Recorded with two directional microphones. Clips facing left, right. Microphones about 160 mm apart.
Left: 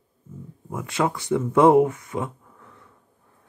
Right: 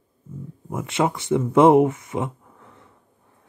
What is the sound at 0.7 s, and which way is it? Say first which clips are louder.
Speech: right 2 dB; 20° right (ahead or behind).